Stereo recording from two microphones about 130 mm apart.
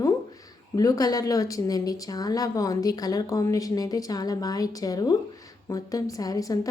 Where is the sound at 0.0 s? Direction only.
25° left (ahead or behind).